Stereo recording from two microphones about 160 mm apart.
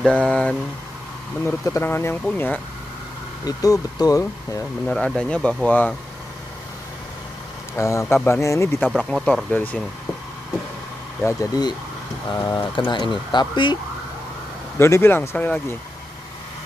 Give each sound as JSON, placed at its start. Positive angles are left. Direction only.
{"t": 0.0, "sound": "speech", "side_deg": 5}
{"t": 1.4, "sound": "speech", "side_deg": 15}
{"t": 3.4, "sound": "speech", "side_deg": 25}
{"t": 4.8, "sound": "speech", "side_deg": 5}
{"t": 7.7, "sound": "speech", "side_deg": 15}
{"t": 8.7, "sound": "speech", "side_deg": 0}
{"t": 11.2, "sound": "speech", "side_deg": 20}
{"t": 14.8, "sound": "speech", "side_deg": 15}